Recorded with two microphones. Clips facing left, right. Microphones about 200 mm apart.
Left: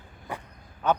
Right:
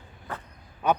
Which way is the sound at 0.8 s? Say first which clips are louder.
Even; 10° right (ahead or behind).